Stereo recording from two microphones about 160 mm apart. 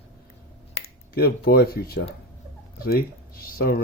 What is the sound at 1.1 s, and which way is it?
Speech, 80° left.